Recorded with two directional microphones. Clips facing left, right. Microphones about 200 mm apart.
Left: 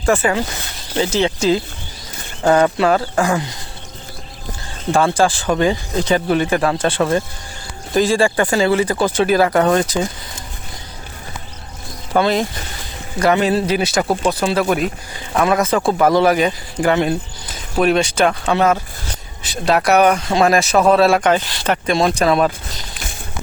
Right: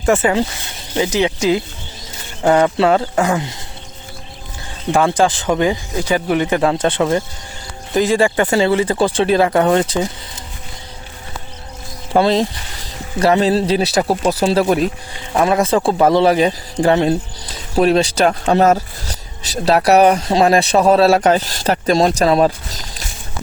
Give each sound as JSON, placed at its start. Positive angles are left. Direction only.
{"t": 0.0, "sound": "speech", "side_deg": -25}
{"t": 4.9, "sound": "speech", "side_deg": -15}
{"t": 12.1, "sound": "speech", "side_deg": -30}